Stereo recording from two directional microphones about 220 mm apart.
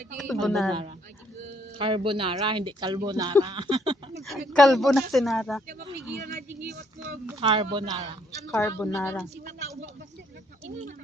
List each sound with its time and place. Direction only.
0.2 s speech: centre (ahead or behind)
1.8 s speech: 25° right (ahead or behind)
4.2 s speech: centre (ahead or behind)
7.4 s speech: 20° right (ahead or behind)
8.4 s a woman's voice: 10° left (ahead or behind)